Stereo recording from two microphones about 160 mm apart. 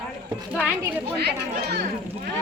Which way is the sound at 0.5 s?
10° right (ahead or behind).